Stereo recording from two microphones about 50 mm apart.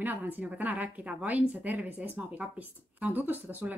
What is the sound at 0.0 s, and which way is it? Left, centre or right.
A woman's voice, right.